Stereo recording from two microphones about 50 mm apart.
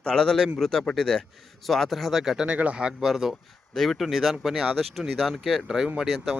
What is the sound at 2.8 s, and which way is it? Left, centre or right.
Speech, centre.